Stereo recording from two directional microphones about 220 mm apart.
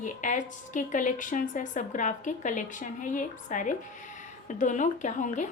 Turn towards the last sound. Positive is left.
turn(degrees=35)  # may be behind; listen again after turning